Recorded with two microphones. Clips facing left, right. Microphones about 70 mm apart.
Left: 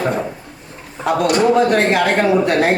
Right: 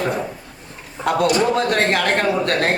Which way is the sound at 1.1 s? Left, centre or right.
Centre.